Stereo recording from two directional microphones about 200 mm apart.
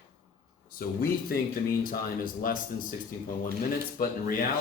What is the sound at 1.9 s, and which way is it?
Speech, 45° left (ahead or behind).